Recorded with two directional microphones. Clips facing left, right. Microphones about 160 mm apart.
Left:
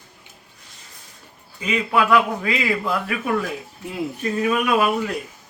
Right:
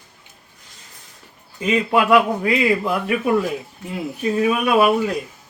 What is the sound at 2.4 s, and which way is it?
Speech, 25° right (ahead or behind).